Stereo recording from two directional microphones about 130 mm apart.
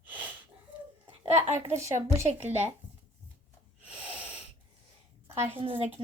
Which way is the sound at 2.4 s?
55° right (ahead or behind).